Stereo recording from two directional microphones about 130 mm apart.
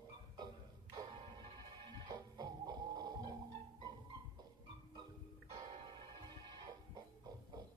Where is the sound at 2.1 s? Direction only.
35° right (ahead or behind).